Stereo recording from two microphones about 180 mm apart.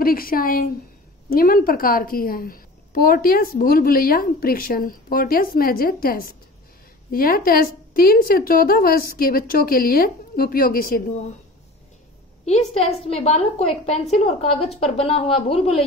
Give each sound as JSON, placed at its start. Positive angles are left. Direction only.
{"t": 0.0, "sound": "a woman's voice", "side_deg": 55}
{"t": 12.4, "sound": "a woman's voice", "side_deg": 35}